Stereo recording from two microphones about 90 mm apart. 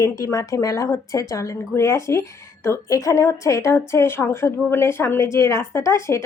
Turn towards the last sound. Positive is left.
turn(degrees=30)  # may be behind; listen again after turning